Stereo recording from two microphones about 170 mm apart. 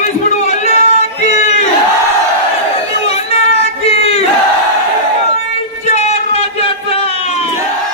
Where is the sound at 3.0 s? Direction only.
35° left (ahead or behind).